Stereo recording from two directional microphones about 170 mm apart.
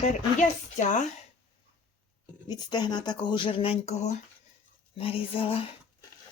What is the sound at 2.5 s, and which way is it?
Speech, 25° left (ahead or behind).